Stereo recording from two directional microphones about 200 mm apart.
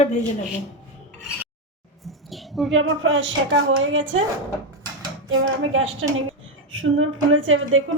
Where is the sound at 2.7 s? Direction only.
80° right.